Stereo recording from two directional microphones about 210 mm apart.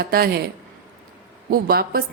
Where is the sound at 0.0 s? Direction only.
45° right (ahead or behind).